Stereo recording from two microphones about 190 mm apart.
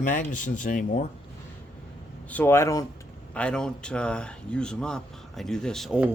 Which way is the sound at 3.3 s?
5° left (ahead or behind).